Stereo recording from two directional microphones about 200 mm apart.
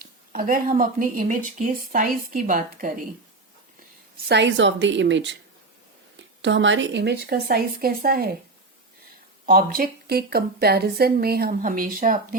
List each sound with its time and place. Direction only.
0.0 s speech: 45° right (ahead or behind)
4.3 s a woman's voice: 60° right (ahead or behind)
6.4 s speech: 65° right (ahead or behind); by 8.3 s 50° right (ahead or behind)
9.5 s speech: 45° right (ahead or behind)